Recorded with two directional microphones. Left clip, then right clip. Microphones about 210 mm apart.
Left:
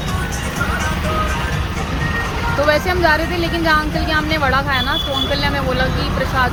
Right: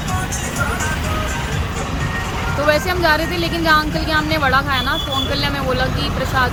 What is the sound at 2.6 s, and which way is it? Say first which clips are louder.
A woman's voice: even; 5° right (ahead or behind).